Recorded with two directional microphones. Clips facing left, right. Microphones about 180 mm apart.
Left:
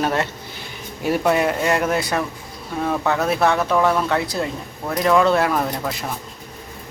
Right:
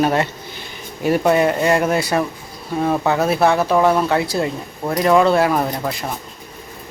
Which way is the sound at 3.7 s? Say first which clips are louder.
Right 3 dB; 20° right (ahead or behind).